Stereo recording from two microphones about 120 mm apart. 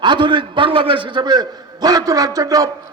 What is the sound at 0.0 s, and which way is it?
A man's voice, 40° right (ahead or behind).